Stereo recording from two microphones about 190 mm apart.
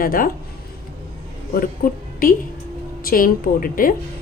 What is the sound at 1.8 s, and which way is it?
Speech, 50° left (ahead or behind).